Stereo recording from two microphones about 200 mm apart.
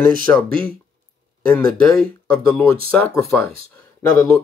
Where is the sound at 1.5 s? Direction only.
5° left (ahead or behind).